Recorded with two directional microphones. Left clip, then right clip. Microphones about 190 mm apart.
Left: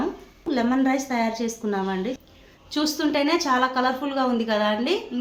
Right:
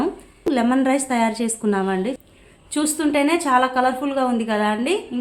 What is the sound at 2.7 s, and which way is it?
A woman's voice, 35° right (ahead or behind).